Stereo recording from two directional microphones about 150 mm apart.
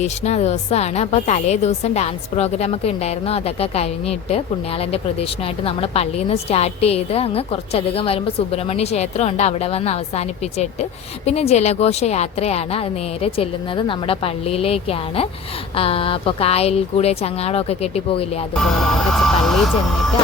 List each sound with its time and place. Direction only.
0.0 s a woman's voice: 45° left (ahead or behind)
5.6 s a woman's voice: 40° left (ahead or behind)
18.6 s speech: centre (ahead or behind)